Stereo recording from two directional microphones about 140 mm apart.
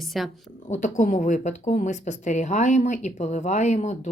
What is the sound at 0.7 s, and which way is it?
Speech, 60° left (ahead or behind).